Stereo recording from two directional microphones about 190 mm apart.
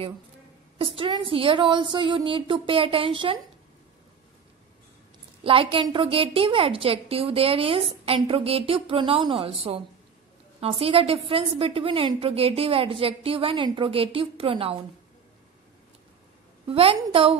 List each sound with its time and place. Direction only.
0.7 s a woman's voice: 30° right (ahead or behind)
5.4 s a woman's voice: 30° right (ahead or behind)
16.6 s a woman's voice: 30° right (ahead or behind)